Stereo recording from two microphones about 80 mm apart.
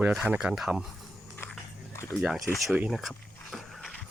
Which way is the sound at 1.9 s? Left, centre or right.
Left.